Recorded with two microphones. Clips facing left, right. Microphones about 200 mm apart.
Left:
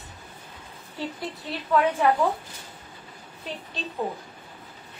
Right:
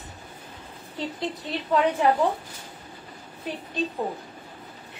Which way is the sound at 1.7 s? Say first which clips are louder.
Even; 20° right (ahead or behind).